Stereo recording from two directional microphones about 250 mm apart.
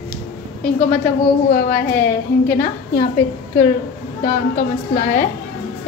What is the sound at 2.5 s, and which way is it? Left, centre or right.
Speech, centre.